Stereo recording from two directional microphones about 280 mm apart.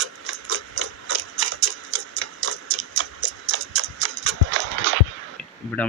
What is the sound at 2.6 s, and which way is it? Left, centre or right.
Tick-tock, right.